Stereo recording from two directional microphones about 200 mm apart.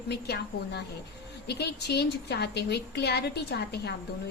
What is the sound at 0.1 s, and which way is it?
A woman's voice, 55° left (ahead or behind).